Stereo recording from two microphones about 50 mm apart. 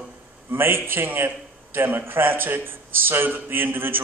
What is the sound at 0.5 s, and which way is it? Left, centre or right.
A man's voice, right.